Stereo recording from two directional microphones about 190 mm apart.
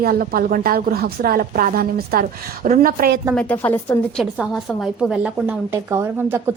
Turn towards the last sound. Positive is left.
turn(degrees=-15)  # may be behind; listen again after turning